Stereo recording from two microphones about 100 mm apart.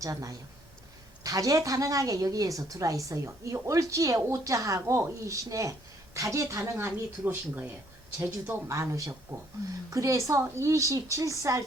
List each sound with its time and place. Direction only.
0.0 s a woman's voice: 35° right (ahead or behind)
9.3 s speech: 15° right (ahead or behind)
9.9 s a woman's voice: 30° right (ahead or behind)